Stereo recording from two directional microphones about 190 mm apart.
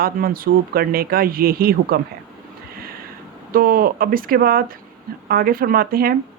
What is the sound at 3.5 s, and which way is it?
Speech, 50° right (ahead or behind).